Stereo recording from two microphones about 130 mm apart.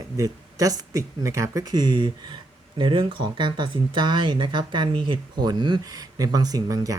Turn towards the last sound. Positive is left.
turn(degrees=-25)  # may be behind; listen again after turning